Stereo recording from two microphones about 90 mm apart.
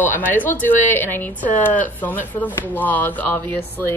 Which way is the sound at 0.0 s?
20° left (ahead or behind).